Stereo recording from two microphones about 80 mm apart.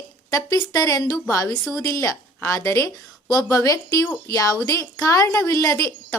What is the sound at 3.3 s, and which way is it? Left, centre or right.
A woman's voice, left.